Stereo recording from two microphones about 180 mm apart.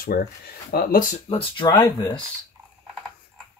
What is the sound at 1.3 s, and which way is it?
Speech, 30° left (ahead or behind).